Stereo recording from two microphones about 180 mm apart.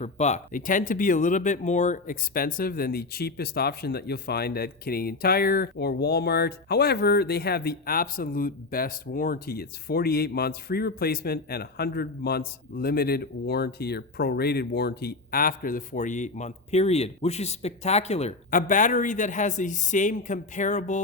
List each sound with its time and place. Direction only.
0.0 s speech: 40° left (ahead or behind)